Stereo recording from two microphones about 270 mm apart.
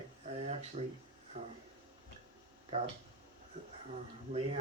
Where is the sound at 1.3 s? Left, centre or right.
Right.